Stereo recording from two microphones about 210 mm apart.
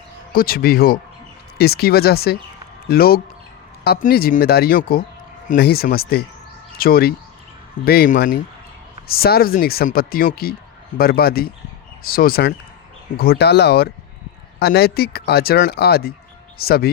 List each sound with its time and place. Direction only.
0.3 s speech: 45° left (ahead or behind)